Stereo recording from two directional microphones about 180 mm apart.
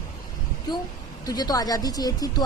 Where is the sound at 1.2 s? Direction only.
20° left (ahead or behind).